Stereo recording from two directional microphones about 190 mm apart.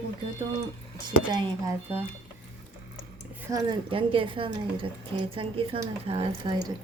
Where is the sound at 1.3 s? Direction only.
20° right (ahead or behind).